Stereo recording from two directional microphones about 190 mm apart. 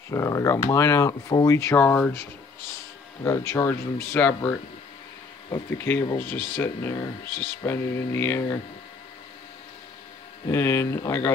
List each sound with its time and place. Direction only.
0.1 s speech: 15° left (ahead or behind)
3.3 s speech: 15° left (ahead or behind)
10.4 s speech: 15° left (ahead or behind)